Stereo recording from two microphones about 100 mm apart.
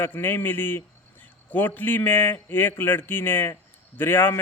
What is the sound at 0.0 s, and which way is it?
A man's voice, 20° left (ahead or behind).